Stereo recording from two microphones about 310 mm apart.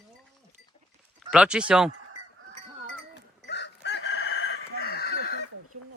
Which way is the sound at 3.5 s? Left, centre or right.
Left.